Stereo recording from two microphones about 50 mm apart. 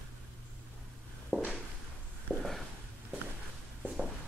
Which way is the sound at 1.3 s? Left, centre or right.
Right.